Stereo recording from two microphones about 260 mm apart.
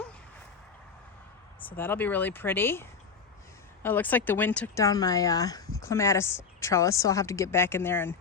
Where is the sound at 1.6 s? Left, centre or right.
Centre.